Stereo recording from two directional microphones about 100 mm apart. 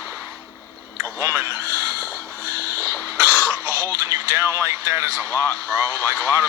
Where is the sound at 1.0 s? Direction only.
25° right (ahead or behind).